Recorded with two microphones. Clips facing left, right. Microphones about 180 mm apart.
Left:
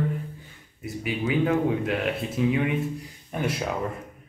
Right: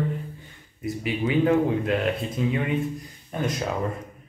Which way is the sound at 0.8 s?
Centre (ahead or behind).